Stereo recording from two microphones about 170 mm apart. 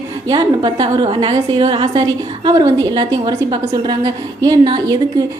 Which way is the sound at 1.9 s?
25° right (ahead or behind).